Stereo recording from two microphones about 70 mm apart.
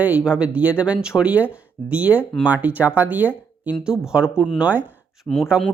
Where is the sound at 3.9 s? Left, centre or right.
Centre.